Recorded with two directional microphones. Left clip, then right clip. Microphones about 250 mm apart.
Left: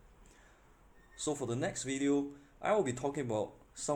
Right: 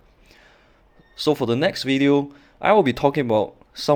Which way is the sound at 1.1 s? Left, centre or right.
Right.